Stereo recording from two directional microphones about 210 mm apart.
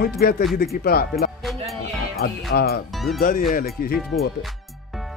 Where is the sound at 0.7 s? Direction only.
45° left (ahead or behind).